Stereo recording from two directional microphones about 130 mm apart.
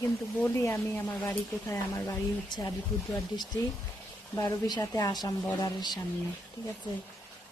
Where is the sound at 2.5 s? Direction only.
35° left (ahead or behind).